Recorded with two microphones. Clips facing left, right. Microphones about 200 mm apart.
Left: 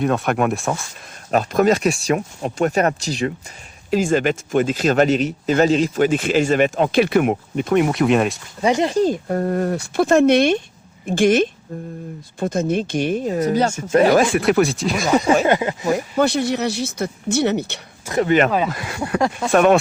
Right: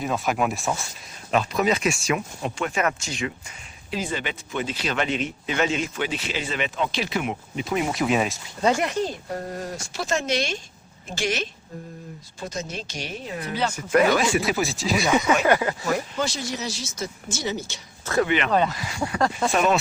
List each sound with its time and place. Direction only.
0.0 s speech: centre (ahead or behind)
1.3 s speech: 45° left (ahead or behind)
7.9 s speech: centre (ahead or behind)
8.8 s speech: 30° left (ahead or behind)
9.0 s a woman's voice: 50° left (ahead or behind); by 14.2 s 35° left (ahead or behind)
14.2 s speech: 55° left (ahead or behind)
15.2 s speech: 30° left (ahead or behind)
15.4 s speech: 20° left (ahead or behind)
16.1 s speech: 60° left (ahead or behind)
18.0 s speech: 20° left (ahead or behind)
18.3 s speech: 45° left (ahead or behind)
18.7 s speech: 60° left (ahead or behind)